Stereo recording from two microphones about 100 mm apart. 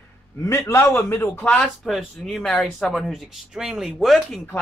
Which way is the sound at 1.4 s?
10° left (ahead or behind).